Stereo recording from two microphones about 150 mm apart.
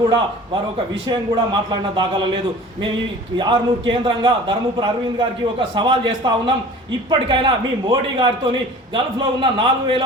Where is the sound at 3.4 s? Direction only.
30° right (ahead or behind).